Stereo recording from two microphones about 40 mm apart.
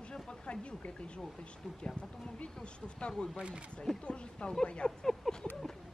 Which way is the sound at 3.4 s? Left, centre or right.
Right.